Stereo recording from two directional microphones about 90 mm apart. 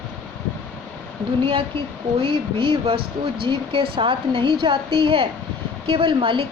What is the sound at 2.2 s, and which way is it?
Speech, 70° right (ahead or behind).